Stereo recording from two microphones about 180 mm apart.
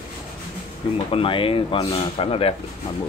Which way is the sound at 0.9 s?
30° left (ahead or behind).